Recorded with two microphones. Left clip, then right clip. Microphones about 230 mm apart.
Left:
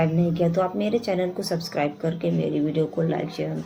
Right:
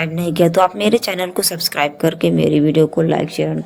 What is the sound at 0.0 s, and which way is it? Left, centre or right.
Speech, right.